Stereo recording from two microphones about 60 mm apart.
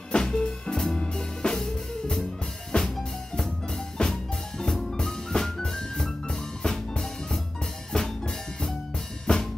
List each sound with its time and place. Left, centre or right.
0.1 s music: centre
7.9 s drum: centre
9.3 s drum kit: centre